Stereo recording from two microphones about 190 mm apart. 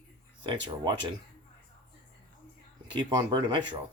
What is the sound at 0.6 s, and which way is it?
Speech, 25° right (ahead or behind).